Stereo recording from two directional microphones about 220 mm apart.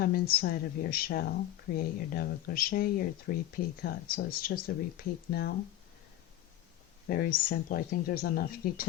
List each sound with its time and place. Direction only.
0.0 s speech: 45° left (ahead or behind)
7.1 s speech: 40° left (ahead or behind)